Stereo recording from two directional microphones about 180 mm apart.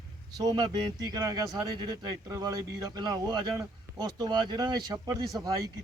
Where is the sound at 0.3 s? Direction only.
20° right (ahead or behind).